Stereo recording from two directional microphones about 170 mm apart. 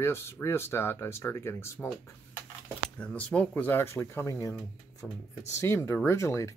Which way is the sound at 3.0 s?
10° left (ahead or behind).